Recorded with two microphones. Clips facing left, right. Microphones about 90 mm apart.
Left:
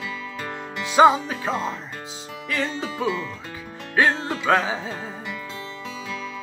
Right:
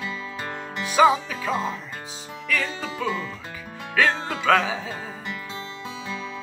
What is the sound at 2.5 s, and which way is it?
Music, 20° left (ahead or behind).